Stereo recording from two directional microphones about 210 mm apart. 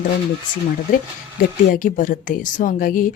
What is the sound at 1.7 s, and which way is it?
Speech, 40° left (ahead or behind).